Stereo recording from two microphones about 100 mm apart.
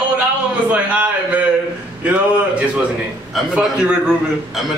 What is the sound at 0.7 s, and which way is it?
Speech, 15° right (ahead or behind).